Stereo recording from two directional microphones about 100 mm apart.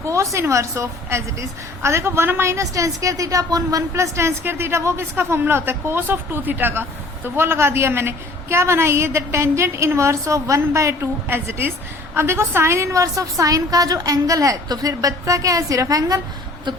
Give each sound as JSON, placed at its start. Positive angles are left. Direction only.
{"t": 0.0, "sound": "a woman's voice", "side_deg": -30}